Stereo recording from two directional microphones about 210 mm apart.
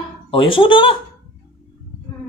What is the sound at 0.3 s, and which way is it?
Speech, 25° left (ahead or behind).